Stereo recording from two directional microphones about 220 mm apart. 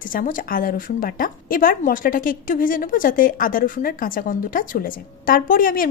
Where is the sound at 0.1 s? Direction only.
40° left (ahead or behind).